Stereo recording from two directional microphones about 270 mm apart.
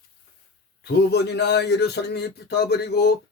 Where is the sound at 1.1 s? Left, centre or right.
Left.